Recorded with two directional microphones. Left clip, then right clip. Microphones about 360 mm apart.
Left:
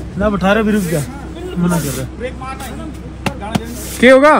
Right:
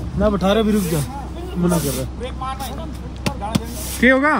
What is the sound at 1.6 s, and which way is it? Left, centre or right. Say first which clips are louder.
Speech: left 1 dB; left.